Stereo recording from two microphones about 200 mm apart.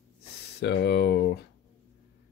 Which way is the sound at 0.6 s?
55° left (ahead or behind).